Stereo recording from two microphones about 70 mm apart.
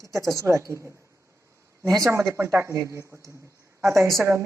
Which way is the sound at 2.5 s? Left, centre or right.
Right.